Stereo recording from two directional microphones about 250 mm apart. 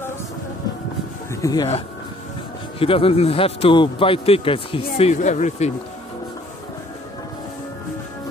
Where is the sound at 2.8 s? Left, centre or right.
Left.